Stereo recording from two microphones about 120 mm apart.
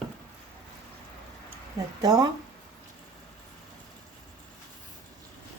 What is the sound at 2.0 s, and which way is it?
Speech, 35° right (ahead or behind).